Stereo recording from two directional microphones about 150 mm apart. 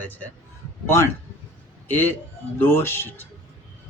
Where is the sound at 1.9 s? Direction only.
15° left (ahead or behind).